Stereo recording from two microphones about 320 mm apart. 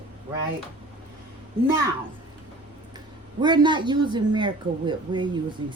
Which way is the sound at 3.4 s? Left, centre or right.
Centre.